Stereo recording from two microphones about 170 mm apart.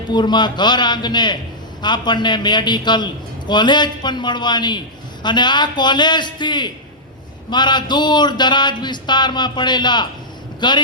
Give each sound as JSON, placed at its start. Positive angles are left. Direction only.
{"t": 0.1, "sound": "a man's voice", "side_deg": 25}